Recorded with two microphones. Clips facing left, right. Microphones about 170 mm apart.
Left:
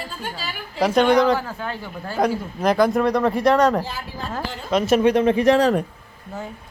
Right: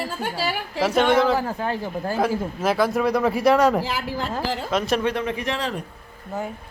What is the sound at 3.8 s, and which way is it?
Speech, 90° right.